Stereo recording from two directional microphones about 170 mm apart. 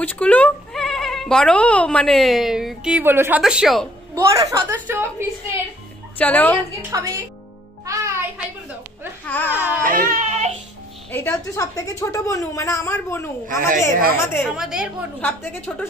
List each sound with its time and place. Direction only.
0.0 s speech: 10° left (ahead or behind)
4.1 s a woman's voice: 20° right (ahead or behind)
6.1 s a woman's voice: 10° left (ahead or behind)
6.9 s a woman's voice: 20° right (ahead or behind)
7.8 s music: 20° right (ahead or behind)
9.2 s speech: 10° left (ahead or behind)
9.5 s a woman's voice: 10° right (ahead or behind)
9.8 s speech: 50° right (ahead or behind)
11.1 s a woman's voice: 15° left (ahead or behind)
14.4 s speech: 5° right (ahead or behind)
15.1 s a woman's voice: 10° left (ahead or behind)